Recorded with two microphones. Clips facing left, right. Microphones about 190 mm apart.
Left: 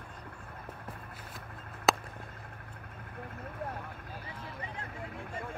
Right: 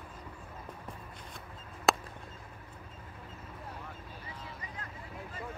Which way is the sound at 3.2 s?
60° left (ahead or behind).